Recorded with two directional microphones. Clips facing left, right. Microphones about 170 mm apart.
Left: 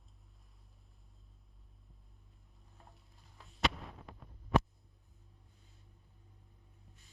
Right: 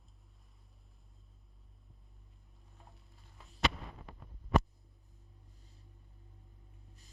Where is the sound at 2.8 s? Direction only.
Centre (ahead or behind).